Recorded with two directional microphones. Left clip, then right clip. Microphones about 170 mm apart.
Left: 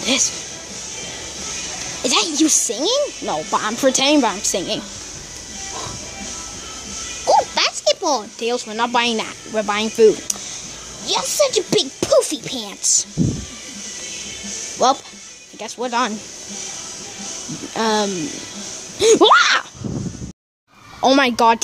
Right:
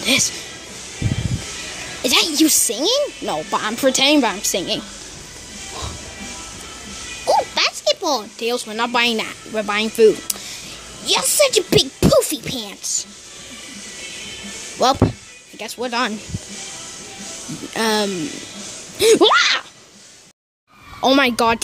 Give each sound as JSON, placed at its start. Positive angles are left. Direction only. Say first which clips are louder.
{"t": 0.0, "sound": "speech", "louder": "right 1 dB", "side_deg": 0}
{"t": 2.0, "sound": "speech", "louder": "right 1 dB", "side_deg": -5}
{"t": 7.2, "sound": "speech", "louder": "left 1 dB", "side_deg": 0}
{"t": 11.1, "sound": "speech", "louder": "right 2 dB", "side_deg": -20}
{"t": 11.8, "sound": "music", "louder": "even", "side_deg": -5}
{"t": 12.8, "sound": "speech", "louder": "left 7 dB", "side_deg": 10}
{"t": 14.8, "sound": "speech", "louder": "right 1 dB", "side_deg": -10}
{"t": 17.7, "sound": "speech", "louder": "even", "side_deg": -5}
{"t": 21.0, "sound": "speech", "louder": "left 1 dB", "side_deg": 0}